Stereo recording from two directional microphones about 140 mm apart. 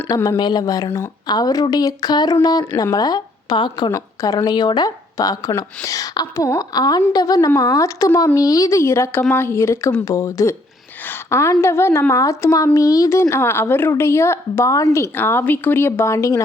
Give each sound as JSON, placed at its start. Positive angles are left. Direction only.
{"t": 0.1, "sound": "speech", "side_deg": 25}
{"t": 3.9, "sound": "speech", "side_deg": 25}
{"t": 11.1, "sound": "a sound", "side_deg": 20}
{"t": 11.6, "sound": "speech", "side_deg": 20}